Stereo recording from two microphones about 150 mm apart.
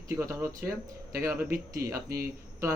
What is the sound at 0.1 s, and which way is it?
Speech, 15° right (ahead or behind).